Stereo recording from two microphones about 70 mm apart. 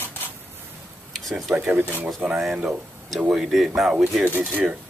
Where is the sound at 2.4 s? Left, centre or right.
Centre.